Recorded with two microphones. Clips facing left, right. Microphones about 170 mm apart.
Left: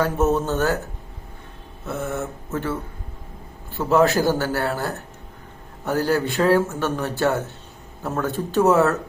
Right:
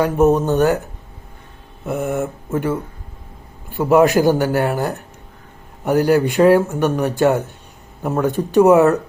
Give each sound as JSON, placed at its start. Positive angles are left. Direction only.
{"t": 0.0, "sound": "speech", "side_deg": -15}
{"t": 1.8, "sound": "speech", "side_deg": -15}